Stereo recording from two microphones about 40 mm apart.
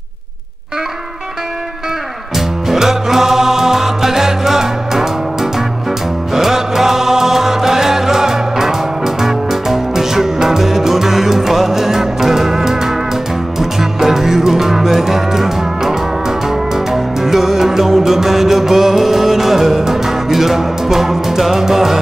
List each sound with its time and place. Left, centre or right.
2.3 s music: centre